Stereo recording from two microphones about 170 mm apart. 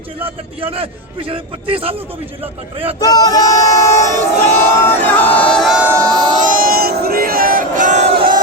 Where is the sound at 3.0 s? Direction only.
20° left (ahead or behind).